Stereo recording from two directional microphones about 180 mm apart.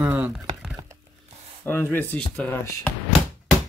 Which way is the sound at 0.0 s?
10° right (ahead or behind).